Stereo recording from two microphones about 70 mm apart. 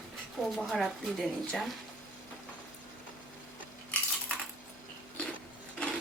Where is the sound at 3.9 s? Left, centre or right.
Centre.